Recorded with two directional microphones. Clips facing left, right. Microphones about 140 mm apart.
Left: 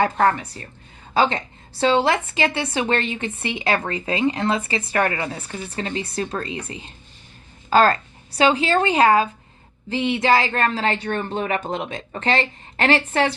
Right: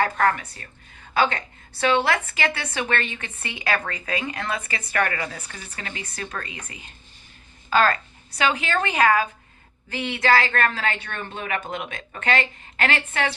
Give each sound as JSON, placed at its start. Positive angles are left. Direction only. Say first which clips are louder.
{"t": 0.0, "sound": "a woman's voice", "louder": "left 3 dB", "side_deg": 25}